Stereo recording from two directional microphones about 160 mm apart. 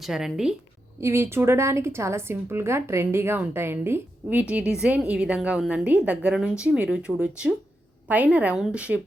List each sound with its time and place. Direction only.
0.0 s speech: centre (ahead or behind)
1.0 s a woman's voice: 15° right (ahead or behind)